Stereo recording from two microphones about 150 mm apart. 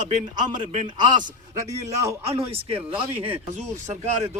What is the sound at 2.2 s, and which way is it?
Speech, 40° right (ahead or behind).